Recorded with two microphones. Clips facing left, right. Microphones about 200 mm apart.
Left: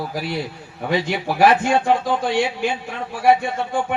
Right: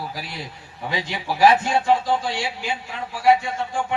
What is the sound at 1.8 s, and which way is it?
A man's voice, 55° left (ahead or behind).